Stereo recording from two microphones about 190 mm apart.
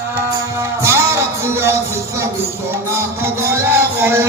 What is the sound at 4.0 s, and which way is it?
Music, 15° right (ahead or behind).